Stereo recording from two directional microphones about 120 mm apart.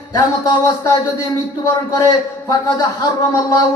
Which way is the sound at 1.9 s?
30° left (ahead or behind).